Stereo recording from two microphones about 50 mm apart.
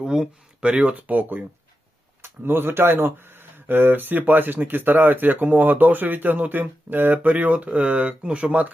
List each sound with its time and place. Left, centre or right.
0.0 s speech: centre
0.6 s speech: right
2.2 s speech: right